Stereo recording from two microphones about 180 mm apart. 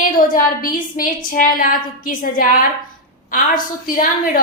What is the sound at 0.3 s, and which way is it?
A woman's voice, 50° left (ahead or behind).